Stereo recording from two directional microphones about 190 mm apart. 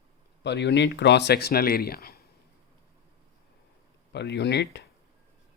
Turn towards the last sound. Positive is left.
turn(degrees=65)  # may be behind; listen again after turning